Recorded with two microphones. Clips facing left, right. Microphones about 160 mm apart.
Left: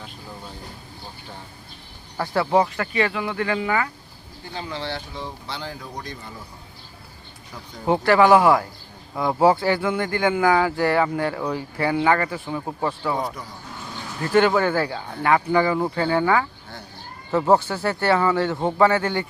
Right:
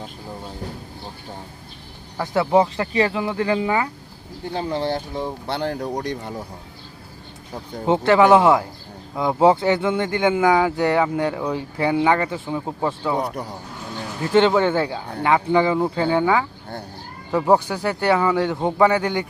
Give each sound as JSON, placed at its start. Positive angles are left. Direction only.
{"t": 2.1, "sound": "speech", "side_deg": -20}
{"t": 4.5, "sound": "speech", "side_deg": -50}
{"t": 5.5, "sound": "speech", "side_deg": -60}
{"t": 7.5, "sound": "speech", "side_deg": -20}
{"t": 17.5, "sound": "speech", "side_deg": -15}